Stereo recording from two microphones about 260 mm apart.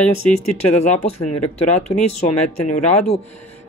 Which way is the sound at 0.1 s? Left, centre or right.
Left.